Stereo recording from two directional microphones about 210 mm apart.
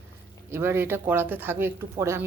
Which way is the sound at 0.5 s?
10° right (ahead or behind).